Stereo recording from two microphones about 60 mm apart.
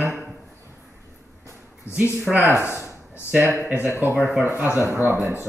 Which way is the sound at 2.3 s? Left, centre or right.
Centre.